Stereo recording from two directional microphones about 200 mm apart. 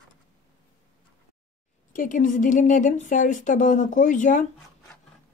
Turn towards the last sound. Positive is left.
turn(degrees=40)  # may be behind; listen again after turning